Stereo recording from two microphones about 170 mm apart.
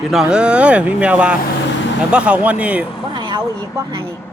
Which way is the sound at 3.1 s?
30° right (ahead or behind).